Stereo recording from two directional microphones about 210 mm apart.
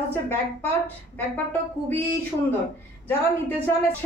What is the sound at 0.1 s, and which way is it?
A man's voice, 10° left (ahead or behind).